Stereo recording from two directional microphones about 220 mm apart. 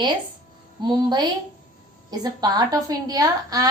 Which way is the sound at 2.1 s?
15° right (ahead or behind).